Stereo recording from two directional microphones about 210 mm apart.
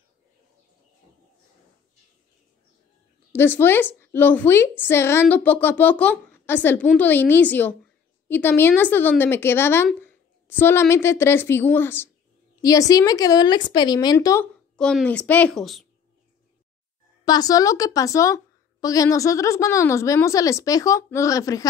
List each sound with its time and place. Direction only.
3.3 s a woman's voice: 10° left (ahead or behind)
17.2 s a woman's voice: 20° left (ahead or behind)